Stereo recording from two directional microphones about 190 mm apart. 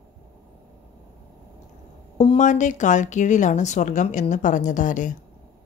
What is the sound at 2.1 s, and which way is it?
A woman's voice, 35° left (ahead or behind).